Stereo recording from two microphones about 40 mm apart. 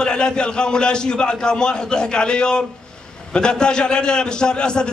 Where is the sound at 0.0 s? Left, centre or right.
Left.